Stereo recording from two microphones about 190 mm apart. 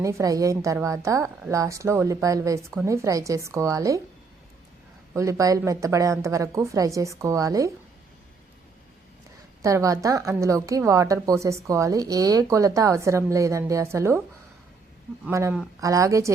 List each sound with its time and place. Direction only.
0.0 s a woman's voice: 15° right (ahead or behind)
5.1 s a woman's voice: 15° right (ahead or behind)
9.6 s a woman's voice: 15° right (ahead or behind)
15.3 s a woman's voice: 15° right (ahead or behind)